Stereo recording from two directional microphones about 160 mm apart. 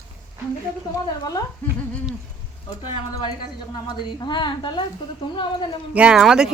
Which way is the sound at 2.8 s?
30° left (ahead or behind).